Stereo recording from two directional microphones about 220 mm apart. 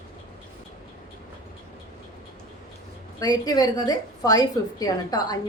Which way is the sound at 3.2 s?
15° left (ahead or behind).